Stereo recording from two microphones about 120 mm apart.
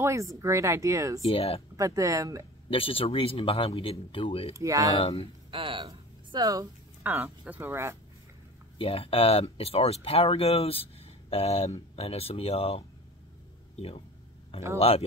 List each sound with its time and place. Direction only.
0.0 s speech: 25° right (ahead or behind)
1.3 s speech: 55° left (ahead or behind)
1.8 s speech: 25° right (ahead or behind)
2.7 s speech: 50° left (ahead or behind)
4.6 s speech: 30° right (ahead or behind)
4.9 s speech: 50° left (ahead or behind)
5.5 s a sound: 45° right (ahead or behind)
6.4 s speech: 30° right (ahead or behind)
7.0 s speech: 15° right (ahead or behind)
8.7 s speech: 50° left (ahead or behind)